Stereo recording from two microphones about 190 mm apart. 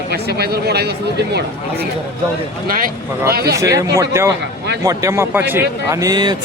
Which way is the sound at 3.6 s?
15° right (ahead or behind).